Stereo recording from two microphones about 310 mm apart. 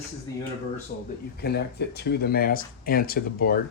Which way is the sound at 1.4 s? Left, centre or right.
Left.